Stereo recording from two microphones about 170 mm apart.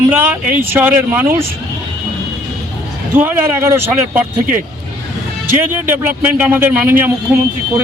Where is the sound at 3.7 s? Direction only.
10° right (ahead or behind).